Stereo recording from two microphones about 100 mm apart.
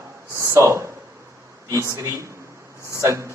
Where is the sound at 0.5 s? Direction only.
25° right (ahead or behind).